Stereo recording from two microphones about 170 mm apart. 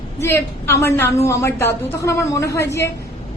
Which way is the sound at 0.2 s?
15° left (ahead or behind).